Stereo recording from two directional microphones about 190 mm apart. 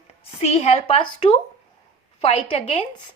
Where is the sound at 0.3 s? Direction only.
30° left (ahead or behind).